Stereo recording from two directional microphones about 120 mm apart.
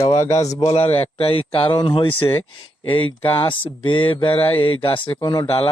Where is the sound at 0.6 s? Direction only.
55° left (ahead or behind).